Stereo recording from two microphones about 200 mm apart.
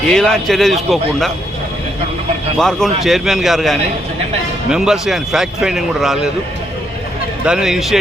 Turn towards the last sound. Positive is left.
turn(degrees=0)  # may be behind; listen again after turning